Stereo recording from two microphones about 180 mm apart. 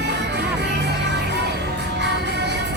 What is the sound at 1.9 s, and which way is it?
Music, 70° right (ahead or behind).